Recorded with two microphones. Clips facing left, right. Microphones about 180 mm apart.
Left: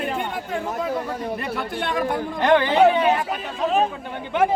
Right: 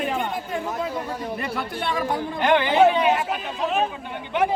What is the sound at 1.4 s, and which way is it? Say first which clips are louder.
Speech: left 1 dB; 50° left (ahead or behind).